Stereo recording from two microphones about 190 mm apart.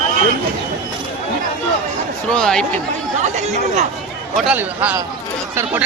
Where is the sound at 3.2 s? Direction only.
35° right (ahead or behind).